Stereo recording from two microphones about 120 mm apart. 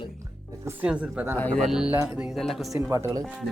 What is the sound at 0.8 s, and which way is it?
Speech, 10° right (ahead or behind).